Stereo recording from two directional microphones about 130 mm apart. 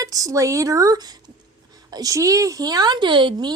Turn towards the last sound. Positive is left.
turn(degrees=-35)  # may be behind; listen again after turning